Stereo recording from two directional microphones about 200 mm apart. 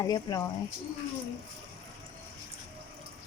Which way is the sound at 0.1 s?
15° left (ahead or behind).